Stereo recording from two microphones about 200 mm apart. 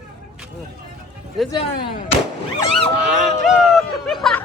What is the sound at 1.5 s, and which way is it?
Speech, 25° left (ahead or behind).